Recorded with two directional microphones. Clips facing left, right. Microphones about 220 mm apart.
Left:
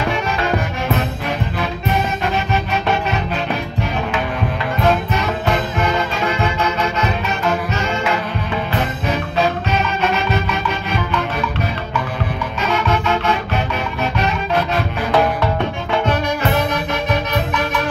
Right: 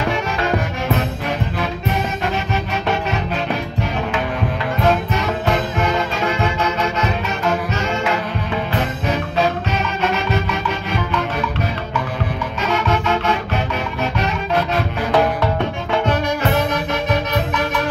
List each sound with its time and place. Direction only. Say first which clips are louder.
0.0 s music: even; 40° right (ahead or behind)
2.2 s music: left 2 dB; 40° right (ahead or behind)
4.8 s music: left 1 dB; 40° right (ahead or behind)
12.6 s music: even; 40° right (ahead or behind)